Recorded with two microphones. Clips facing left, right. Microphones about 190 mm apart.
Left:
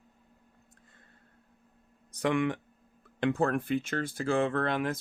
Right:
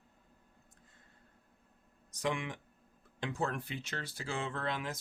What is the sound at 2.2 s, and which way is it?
Speech, 60° left (ahead or behind).